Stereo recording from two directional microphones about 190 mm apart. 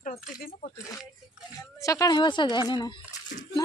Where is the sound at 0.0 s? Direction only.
40° left (ahead or behind).